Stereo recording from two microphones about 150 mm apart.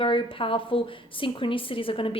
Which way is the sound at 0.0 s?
35° left (ahead or behind).